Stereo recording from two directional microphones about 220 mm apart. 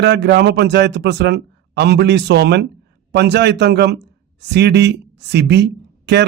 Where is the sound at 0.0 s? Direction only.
50° right (ahead or behind).